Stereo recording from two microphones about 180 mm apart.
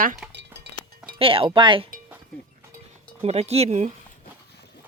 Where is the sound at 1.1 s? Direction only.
30° right (ahead or behind).